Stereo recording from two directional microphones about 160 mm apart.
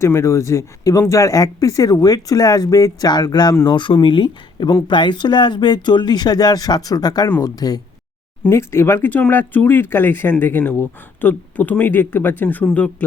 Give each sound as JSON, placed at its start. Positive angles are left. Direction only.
{"t": 0.0, "sound": "speech", "side_deg": 15}